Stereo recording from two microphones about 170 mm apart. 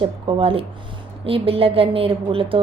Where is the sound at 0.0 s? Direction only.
30° right (ahead or behind).